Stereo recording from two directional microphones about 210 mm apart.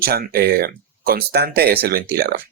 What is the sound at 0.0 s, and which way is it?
Speech, 45° right (ahead or behind).